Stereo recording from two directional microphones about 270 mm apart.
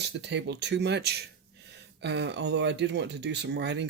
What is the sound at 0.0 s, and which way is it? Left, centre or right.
Speech, right.